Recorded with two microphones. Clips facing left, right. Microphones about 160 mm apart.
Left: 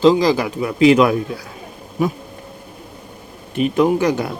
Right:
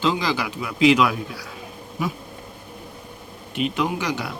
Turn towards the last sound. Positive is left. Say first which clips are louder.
# left 9 dB
turn(degrees=45)  # may be behind; listen again after turning